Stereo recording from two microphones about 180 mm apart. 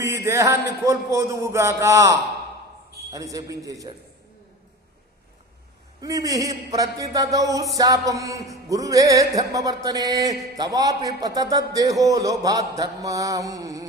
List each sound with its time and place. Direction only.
0.0 s a man's voice: 15° right (ahead or behind)
6.0 s a man's voice: 20° right (ahead or behind)